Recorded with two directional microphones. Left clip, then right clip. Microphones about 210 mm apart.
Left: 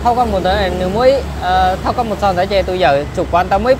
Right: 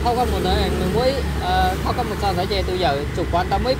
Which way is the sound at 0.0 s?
45° left (ahead or behind).